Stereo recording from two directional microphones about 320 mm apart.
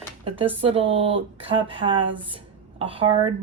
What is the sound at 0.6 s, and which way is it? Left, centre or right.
Speech, centre.